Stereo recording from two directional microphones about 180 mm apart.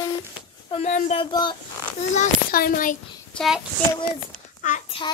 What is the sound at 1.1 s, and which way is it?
Speech, 25° left (ahead or behind).